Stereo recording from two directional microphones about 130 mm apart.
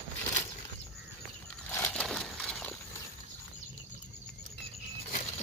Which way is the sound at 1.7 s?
15° left (ahead or behind).